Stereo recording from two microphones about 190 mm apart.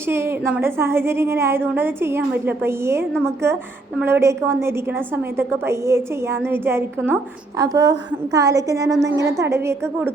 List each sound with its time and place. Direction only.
0.1 s a woman's voice: 15° right (ahead or behind)